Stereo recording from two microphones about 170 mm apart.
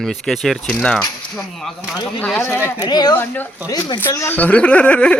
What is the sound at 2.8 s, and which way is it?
Speech, 25° left (ahead or behind).